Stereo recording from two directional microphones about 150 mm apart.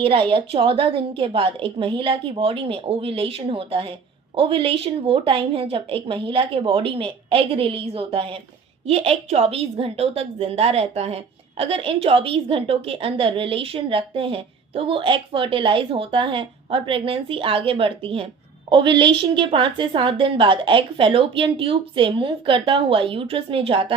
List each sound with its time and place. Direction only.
0.0 s a woman's voice: 35° right (ahead or behind)